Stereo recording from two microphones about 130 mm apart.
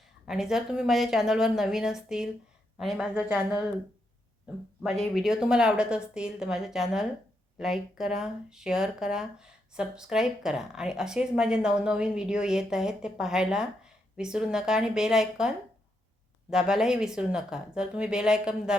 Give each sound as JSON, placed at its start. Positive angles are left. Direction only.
{"t": 0.3, "sound": "a woman's voice", "side_deg": -5}